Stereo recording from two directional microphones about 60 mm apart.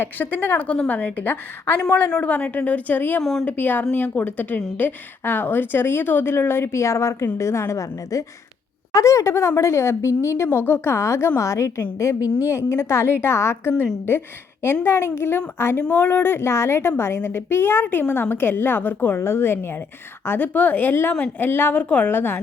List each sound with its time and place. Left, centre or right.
0.0 s a woman's voice: left
2.0 s a woman's voice: centre
2.3 s a woman's voice: left
3.2 s a woman's voice: centre
3.4 s a woman's voice: left
14.1 s a woman's voice: left